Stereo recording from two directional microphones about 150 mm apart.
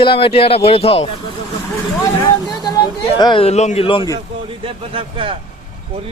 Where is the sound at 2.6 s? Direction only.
30° left (ahead or behind).